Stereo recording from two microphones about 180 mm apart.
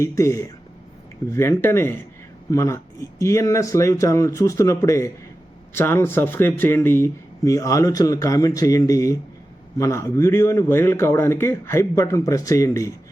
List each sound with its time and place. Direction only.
0.0 s speech: 15° left (ahead or behind)